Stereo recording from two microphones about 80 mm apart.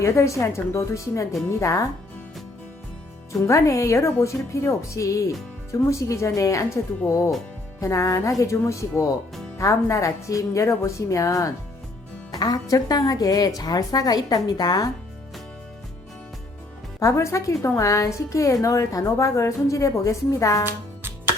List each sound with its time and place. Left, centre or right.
0.0 s a woman's voice: left
3.4 s a woman's voice: left
12.3 s speech: left
17.0 s a woman's voice: left